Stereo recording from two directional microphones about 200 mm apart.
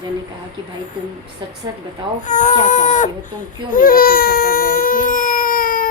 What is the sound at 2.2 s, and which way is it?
Speech, 35° left (ahead or behind).